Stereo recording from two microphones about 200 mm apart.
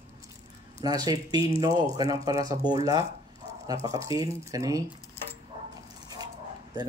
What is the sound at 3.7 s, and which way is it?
Speech, 15° right (ahead or behind).